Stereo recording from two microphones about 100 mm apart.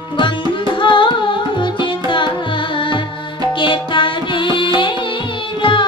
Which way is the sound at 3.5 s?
55° left (ahead or behind).